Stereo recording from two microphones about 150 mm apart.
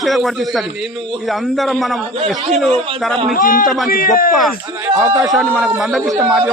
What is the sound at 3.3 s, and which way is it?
Speech, 70° left (ahead or behind).